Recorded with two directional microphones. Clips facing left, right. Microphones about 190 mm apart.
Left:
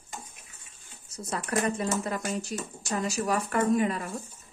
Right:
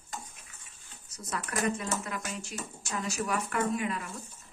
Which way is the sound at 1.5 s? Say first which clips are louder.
Left 4 dB; 30° left (ahead or behind).